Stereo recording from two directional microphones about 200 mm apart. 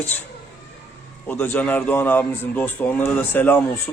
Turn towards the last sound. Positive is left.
turn(degrees=10)  # may be behind; listen again after turning